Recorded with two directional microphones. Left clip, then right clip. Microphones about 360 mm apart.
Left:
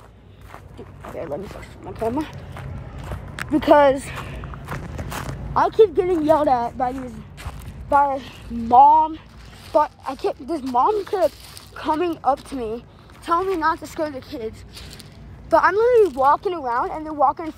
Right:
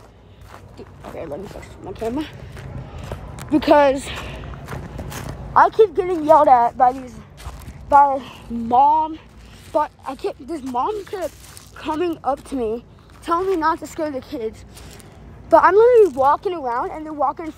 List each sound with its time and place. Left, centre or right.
0.5 s a sound: centre
2.0 s speech: centre
3.3 s walk: centre
5.5 s a woman's voice: centre